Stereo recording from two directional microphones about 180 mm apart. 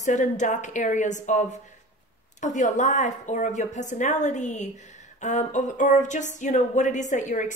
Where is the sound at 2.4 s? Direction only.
40° left (ahead or behind).